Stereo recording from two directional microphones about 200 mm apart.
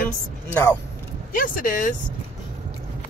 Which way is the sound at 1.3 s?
45° left (ahead or behind).